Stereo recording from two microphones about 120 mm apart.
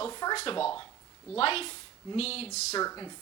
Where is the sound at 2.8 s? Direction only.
30° left (ahead or behind).